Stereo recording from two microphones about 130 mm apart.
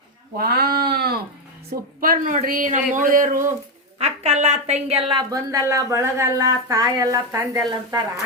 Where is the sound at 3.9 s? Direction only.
55° right (ahead or behind); by 5.2 s 40° right (ahead or behind).